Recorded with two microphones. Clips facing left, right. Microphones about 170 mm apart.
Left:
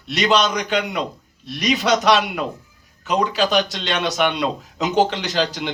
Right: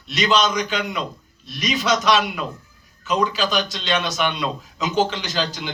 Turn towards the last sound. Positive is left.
turn(degrees=65)  # may be behind; listen again after turning